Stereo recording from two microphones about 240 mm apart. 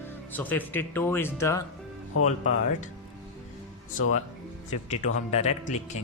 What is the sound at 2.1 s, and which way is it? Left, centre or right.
Speech, left.